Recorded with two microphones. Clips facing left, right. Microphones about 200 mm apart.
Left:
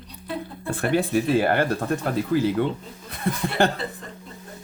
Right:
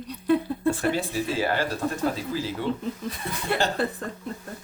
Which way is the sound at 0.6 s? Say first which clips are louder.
Left 3 dB; 60° left (ahead or behind).